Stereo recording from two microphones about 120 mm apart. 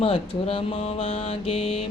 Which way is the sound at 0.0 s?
50° left (ahead or behind).